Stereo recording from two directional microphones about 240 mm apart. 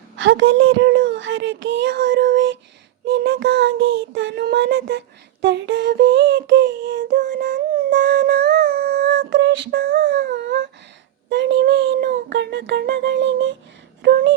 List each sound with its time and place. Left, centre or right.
0.2 s female singing: right
7.2 s a sound: right
7.9 s female singing: right